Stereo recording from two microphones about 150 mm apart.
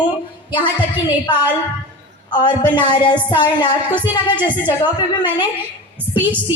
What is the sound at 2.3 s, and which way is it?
Speech, 30° left (ahead or behind).